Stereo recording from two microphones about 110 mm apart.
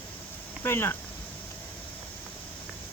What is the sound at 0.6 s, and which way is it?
Speech, 20° left (ahead or behind).